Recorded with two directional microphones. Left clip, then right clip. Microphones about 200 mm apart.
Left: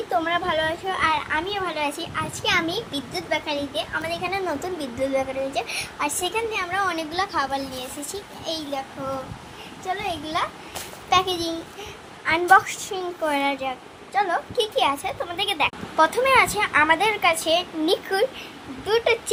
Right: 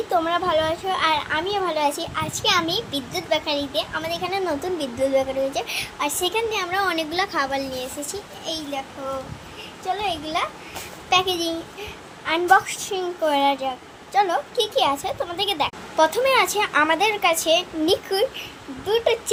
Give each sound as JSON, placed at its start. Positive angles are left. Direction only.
{"t": 0.1, "sound": "a child's voice", "side_deg": -15}
{"t": 8.1, "sound": "a child's voice", "side_deg": 5}
{"t": 9.8, "sound": "a child's voice", "side_deg": 0}